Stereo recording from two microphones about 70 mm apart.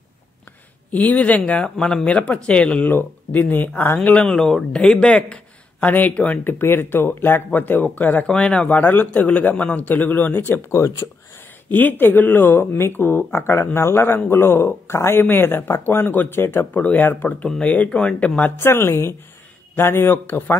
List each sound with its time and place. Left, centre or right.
0.9 s a man's voice: left
4.0 s speech: centre
6.6 s a man's voice: left
8.3 s speech: centre
8.7 s a man's voice: left
12.0 s a man's voice: left
17.5 s speech: centre
18.6 s speech: left